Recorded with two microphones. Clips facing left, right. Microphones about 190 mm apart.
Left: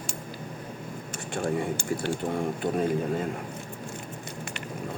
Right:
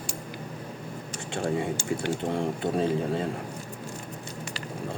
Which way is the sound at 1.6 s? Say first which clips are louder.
Even; 20° right (ahead or behind).